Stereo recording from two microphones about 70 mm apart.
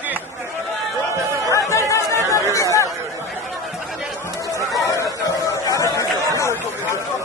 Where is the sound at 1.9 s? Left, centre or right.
Left.